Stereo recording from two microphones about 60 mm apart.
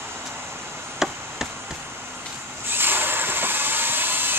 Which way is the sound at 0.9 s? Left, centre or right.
Centre.